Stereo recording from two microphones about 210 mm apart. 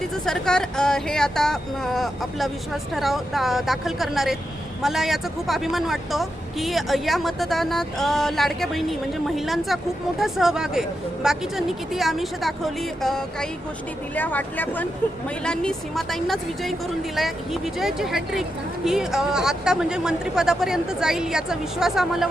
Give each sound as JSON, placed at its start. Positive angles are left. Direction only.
{"t": 0.3, "sound": "a woman's voice", "side_deg": 5}